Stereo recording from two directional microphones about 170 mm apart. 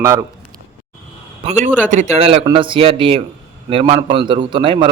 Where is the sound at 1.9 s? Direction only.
45° right (ahead or behind).